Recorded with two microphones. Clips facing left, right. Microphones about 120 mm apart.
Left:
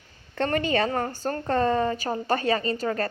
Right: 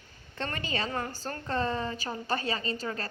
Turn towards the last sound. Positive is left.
turn(degrees=45)  # may be behind; listen again after turning